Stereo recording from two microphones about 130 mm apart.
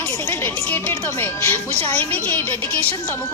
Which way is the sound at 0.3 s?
15° left (ahead or behind).